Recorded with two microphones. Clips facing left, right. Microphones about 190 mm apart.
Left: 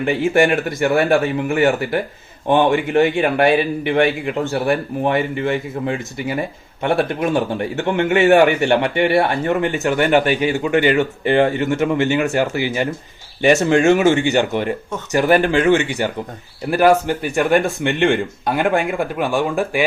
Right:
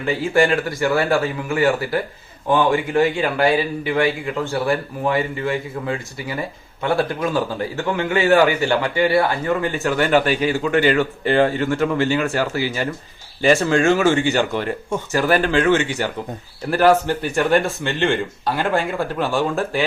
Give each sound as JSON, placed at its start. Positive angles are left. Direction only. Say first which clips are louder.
{"t": 0.0, "sound": "a man's voice", "louder": "left 2 dB", "side_deg": 20}